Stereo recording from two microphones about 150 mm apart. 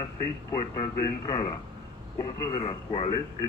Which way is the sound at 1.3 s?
35° left (ahead or behind).